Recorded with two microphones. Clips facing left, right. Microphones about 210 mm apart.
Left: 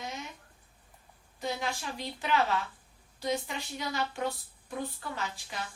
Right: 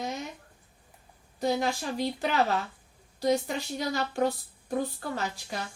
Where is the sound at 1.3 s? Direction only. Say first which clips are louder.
Right 7 dB; 40° right (ahead or behind).